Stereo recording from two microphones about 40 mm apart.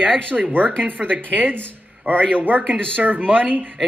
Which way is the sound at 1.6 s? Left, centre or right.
Right.